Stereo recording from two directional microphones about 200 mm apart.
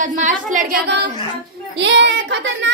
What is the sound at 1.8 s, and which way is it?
Speech, 60° right (ahead or behind).